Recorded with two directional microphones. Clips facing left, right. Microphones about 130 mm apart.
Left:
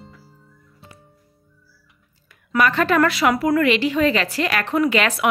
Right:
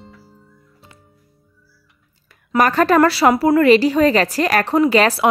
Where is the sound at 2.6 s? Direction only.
40° right (ahead or behind).